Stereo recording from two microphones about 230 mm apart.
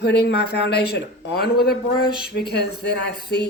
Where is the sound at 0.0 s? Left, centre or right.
Left.